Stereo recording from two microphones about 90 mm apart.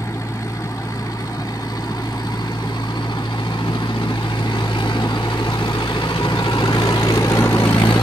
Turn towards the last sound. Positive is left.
turn(degrees=35)  # may be behind; listen again after turning